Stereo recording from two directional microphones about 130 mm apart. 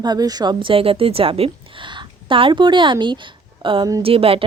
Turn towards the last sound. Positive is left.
turn(degrees=-45)  # may be behind; listen again after turning